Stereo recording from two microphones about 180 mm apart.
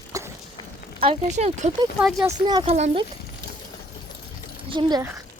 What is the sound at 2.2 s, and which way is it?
Speech, 20° right (ahead or behind).